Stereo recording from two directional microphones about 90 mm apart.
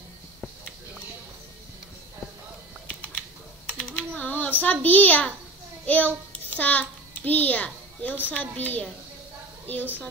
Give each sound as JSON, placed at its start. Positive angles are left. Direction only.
{"t": 2.9, "sound": "typing", "side_deg": 15}
{"t": 4.6, "sound": "a child's voice", "side_deg": 20}